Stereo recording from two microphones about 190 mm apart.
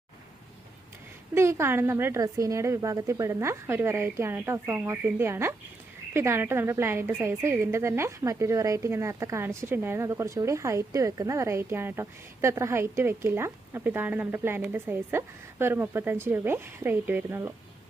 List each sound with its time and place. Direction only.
1.3 s a woman's voice: 15° right (ahead or behind)